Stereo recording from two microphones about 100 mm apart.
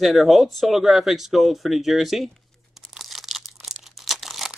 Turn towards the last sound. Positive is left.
turn(degrees=0)  # may be behind; listen again after turning